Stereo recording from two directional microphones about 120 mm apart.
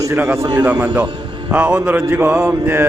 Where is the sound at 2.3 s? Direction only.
5° right (ahead or behind).